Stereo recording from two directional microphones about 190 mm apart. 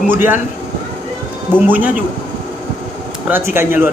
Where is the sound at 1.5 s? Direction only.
10° right (ahead or behind).